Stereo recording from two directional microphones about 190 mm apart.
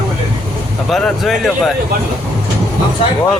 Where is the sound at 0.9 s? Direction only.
Centre (ahead or behind).